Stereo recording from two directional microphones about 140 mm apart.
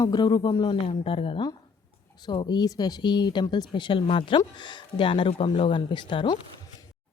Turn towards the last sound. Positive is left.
turn(degrees=35)  # may be behind; listen again after turning